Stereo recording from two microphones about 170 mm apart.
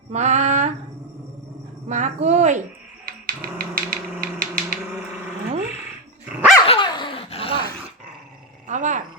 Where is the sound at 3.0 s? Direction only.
60° right (ahead or behind).